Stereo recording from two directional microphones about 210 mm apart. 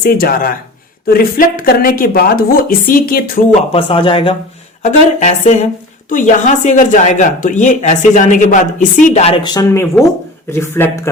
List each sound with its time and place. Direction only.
0.0 s speech: 45° left (ahead or behind)
3.7 s speech: 25° left (ahead or behind)
4.8 s speech: 35° left (ahead or behind); by 11.1 s 10° left (ahead or behind)